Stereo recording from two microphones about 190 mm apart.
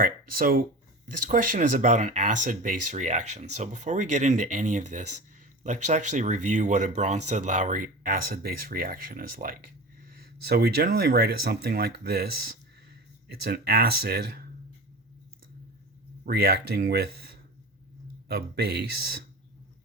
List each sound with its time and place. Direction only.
0.0 s speech: 50° right (ahead or behind)
16.2 s speech: 55° right (ahead or behind)